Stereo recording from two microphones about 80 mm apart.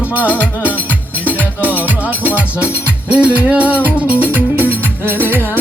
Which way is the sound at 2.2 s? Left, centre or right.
Centre.